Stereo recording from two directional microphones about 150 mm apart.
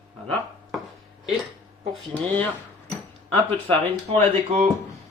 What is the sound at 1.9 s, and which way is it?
Speech, 10° left (ahead or behind).